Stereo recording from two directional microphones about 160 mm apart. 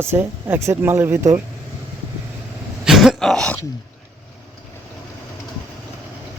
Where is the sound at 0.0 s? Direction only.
15° right (ahead or behind).